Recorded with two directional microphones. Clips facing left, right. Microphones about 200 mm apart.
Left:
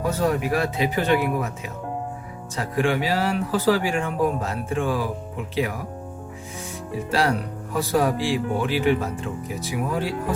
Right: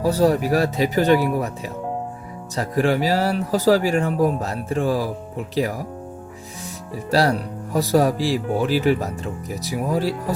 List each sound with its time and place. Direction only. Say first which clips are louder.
0.0 s speech: right 5 dB; 35° right (ahead or behind)
7.1 s speech: right 4 dB; 40° right (ahead or behind)